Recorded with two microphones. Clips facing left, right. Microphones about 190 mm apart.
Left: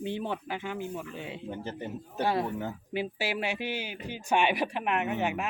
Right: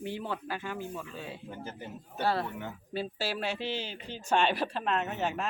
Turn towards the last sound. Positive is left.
turn(degrees=15)  # may be behind; listen again after turning